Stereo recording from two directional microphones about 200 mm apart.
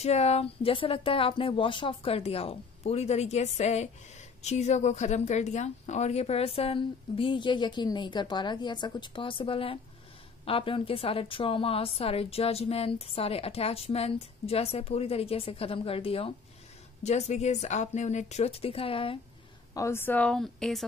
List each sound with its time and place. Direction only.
0.0 s a woman's voice: 30° left (ahead or behind)
19.7 s a woman's voice: 15° left (ahead or behind)